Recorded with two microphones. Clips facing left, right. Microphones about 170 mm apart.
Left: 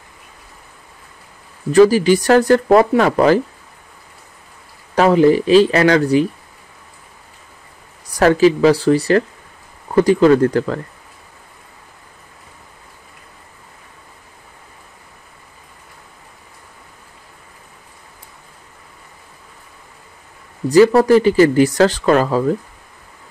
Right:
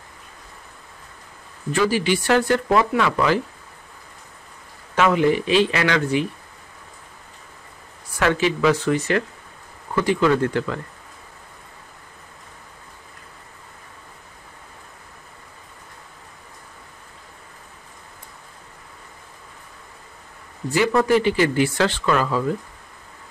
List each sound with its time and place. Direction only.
1.7 s speech: 40° left (ahead or behind)
4.9 s speech: 35° left (ahead or behind)
8.1 s speech: 35° left (ahead or behind)
20.6 s speech: 40° left (ahead or behind)